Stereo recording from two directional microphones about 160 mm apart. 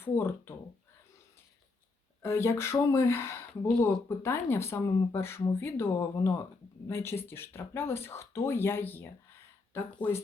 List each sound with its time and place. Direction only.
0.0 s speech: 15° left (ahead or behind)
2.2 s speech: 15° left (ahead or behind)